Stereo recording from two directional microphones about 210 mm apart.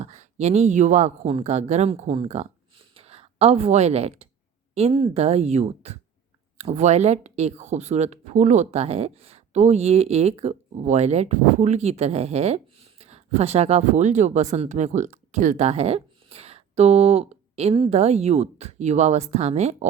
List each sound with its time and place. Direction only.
0.0 s a woman's voice: 35° right (ahead or behind)